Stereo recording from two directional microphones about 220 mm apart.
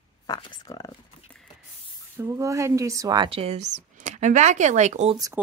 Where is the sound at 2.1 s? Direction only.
15° right (ahead or behind); by 5.1 s 30° right (ahead or behind).